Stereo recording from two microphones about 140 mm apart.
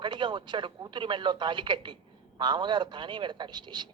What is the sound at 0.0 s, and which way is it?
A man's voice, 30° right (ahead or behind).